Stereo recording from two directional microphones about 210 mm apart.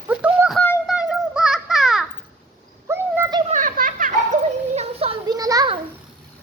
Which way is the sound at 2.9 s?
15° right (ahead or behind).